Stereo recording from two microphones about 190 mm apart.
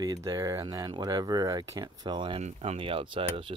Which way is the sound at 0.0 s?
20° right (ahead or behind).